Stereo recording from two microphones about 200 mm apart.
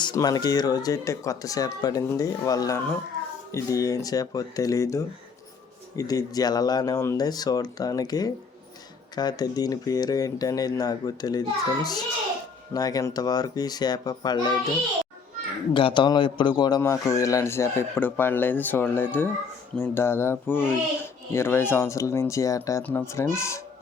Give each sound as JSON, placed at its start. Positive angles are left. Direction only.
{"t": 0.0, "sound": "speech", "side_deg": 20}
{"t": 15.7, "sound": "speech", "side_deg": 25}